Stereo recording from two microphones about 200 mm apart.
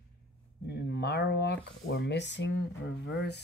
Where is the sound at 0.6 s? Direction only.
55° left (ahead or behind).